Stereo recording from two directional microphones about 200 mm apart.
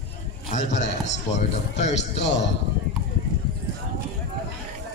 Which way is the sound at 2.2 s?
60° left (ahead or behind).